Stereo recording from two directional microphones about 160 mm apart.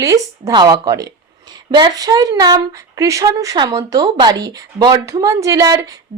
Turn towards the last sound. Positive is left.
turn(degrees=-20)  # may be behind; listen again after turning